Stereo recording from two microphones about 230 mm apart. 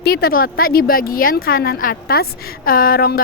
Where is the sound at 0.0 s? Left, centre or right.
Left.